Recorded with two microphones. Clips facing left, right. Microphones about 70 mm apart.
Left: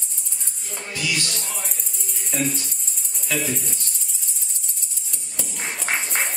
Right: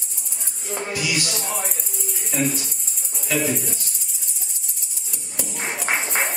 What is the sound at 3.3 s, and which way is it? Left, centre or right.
Speech, centre.